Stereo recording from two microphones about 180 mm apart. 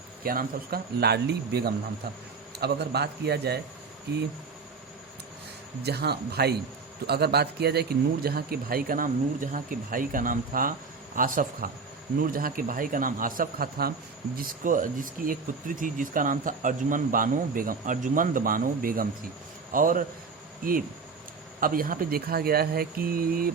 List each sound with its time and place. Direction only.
0.2 s speech: 55° right (ahead or behind)
5.8 s speech: 65° right (ahead or behind); by 20.1 s 50° right (ahead or behind)
21.6 s speech: 50° right (ahead or behind)